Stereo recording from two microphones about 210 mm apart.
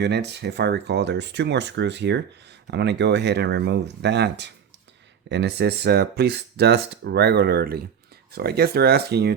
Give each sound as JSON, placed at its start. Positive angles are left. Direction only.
{"t": 0.0, "sound": "speech", "side_deg": -55}